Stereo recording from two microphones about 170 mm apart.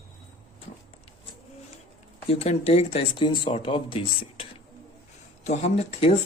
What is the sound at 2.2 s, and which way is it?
Speech, 35° left (ahead or behind).